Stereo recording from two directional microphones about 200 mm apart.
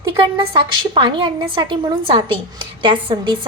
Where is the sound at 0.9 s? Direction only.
25° right (ahead or behind).